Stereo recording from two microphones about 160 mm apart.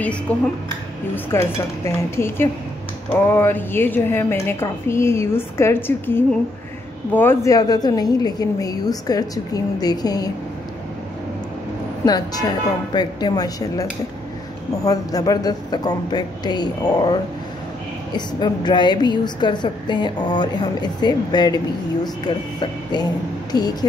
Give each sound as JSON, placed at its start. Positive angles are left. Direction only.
{"t": 0.3, "sound": "a woman's voice", "side_deg": 10}
{"t": 12.0, "sound": "a woman's voice", "side_deg": 25}
{"t": 14.9, "sound": "a woman's voice", "side_deg": 20}
{"t": 22.6, "sound": "a woman's voice", "side_deg": 25}